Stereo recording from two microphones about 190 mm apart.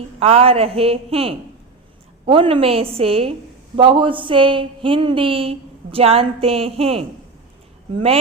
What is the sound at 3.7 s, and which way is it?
Speech, 25° right (ahead or behind).